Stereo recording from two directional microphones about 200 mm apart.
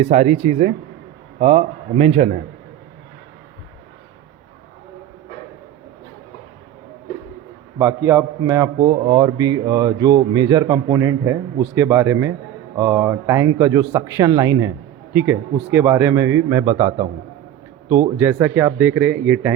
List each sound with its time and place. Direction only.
0.0 s a man's voice: 35° right (ahead or behind)
7.8 s a man's voice: 10° right (ahead or behind)
18.2 s a man's voice: 10° right (ahead or behind)